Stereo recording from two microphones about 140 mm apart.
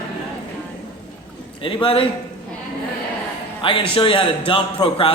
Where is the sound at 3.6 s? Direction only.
40° left (ahead or behind).